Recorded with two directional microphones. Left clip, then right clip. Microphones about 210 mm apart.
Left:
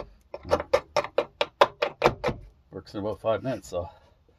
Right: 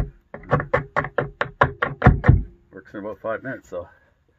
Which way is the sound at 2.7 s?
5° left (ahead or behind).